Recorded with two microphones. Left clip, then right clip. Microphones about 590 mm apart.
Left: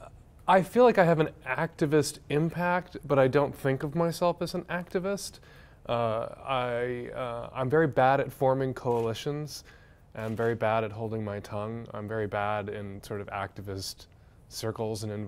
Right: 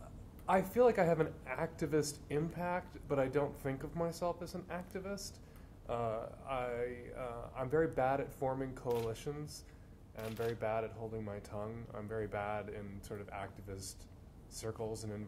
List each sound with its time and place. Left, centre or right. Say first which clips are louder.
0.5 s a woman's voice: left 9 dB; left